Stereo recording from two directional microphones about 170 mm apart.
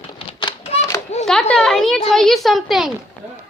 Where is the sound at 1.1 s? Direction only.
40° left (ahead or behind).